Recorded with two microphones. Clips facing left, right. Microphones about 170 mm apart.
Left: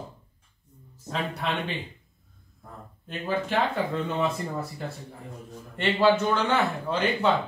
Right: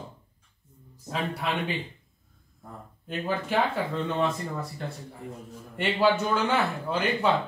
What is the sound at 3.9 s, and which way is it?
Speech, 5° left (ahead or behind).